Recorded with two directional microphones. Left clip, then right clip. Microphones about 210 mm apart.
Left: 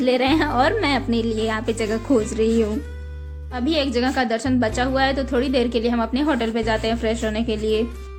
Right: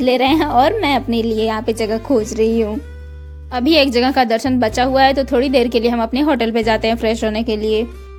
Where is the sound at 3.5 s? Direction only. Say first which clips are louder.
Right 8 dB; 40° right (ahead or behind).